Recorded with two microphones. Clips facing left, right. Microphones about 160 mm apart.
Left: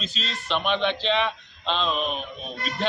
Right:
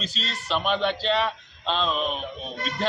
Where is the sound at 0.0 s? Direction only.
40° right (ahead or behind).